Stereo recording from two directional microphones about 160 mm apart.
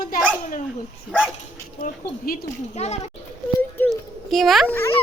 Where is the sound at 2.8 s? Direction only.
40° left (ahead or behind).